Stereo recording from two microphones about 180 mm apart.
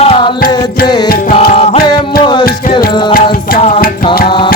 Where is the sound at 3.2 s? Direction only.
35° left (ahead or behind).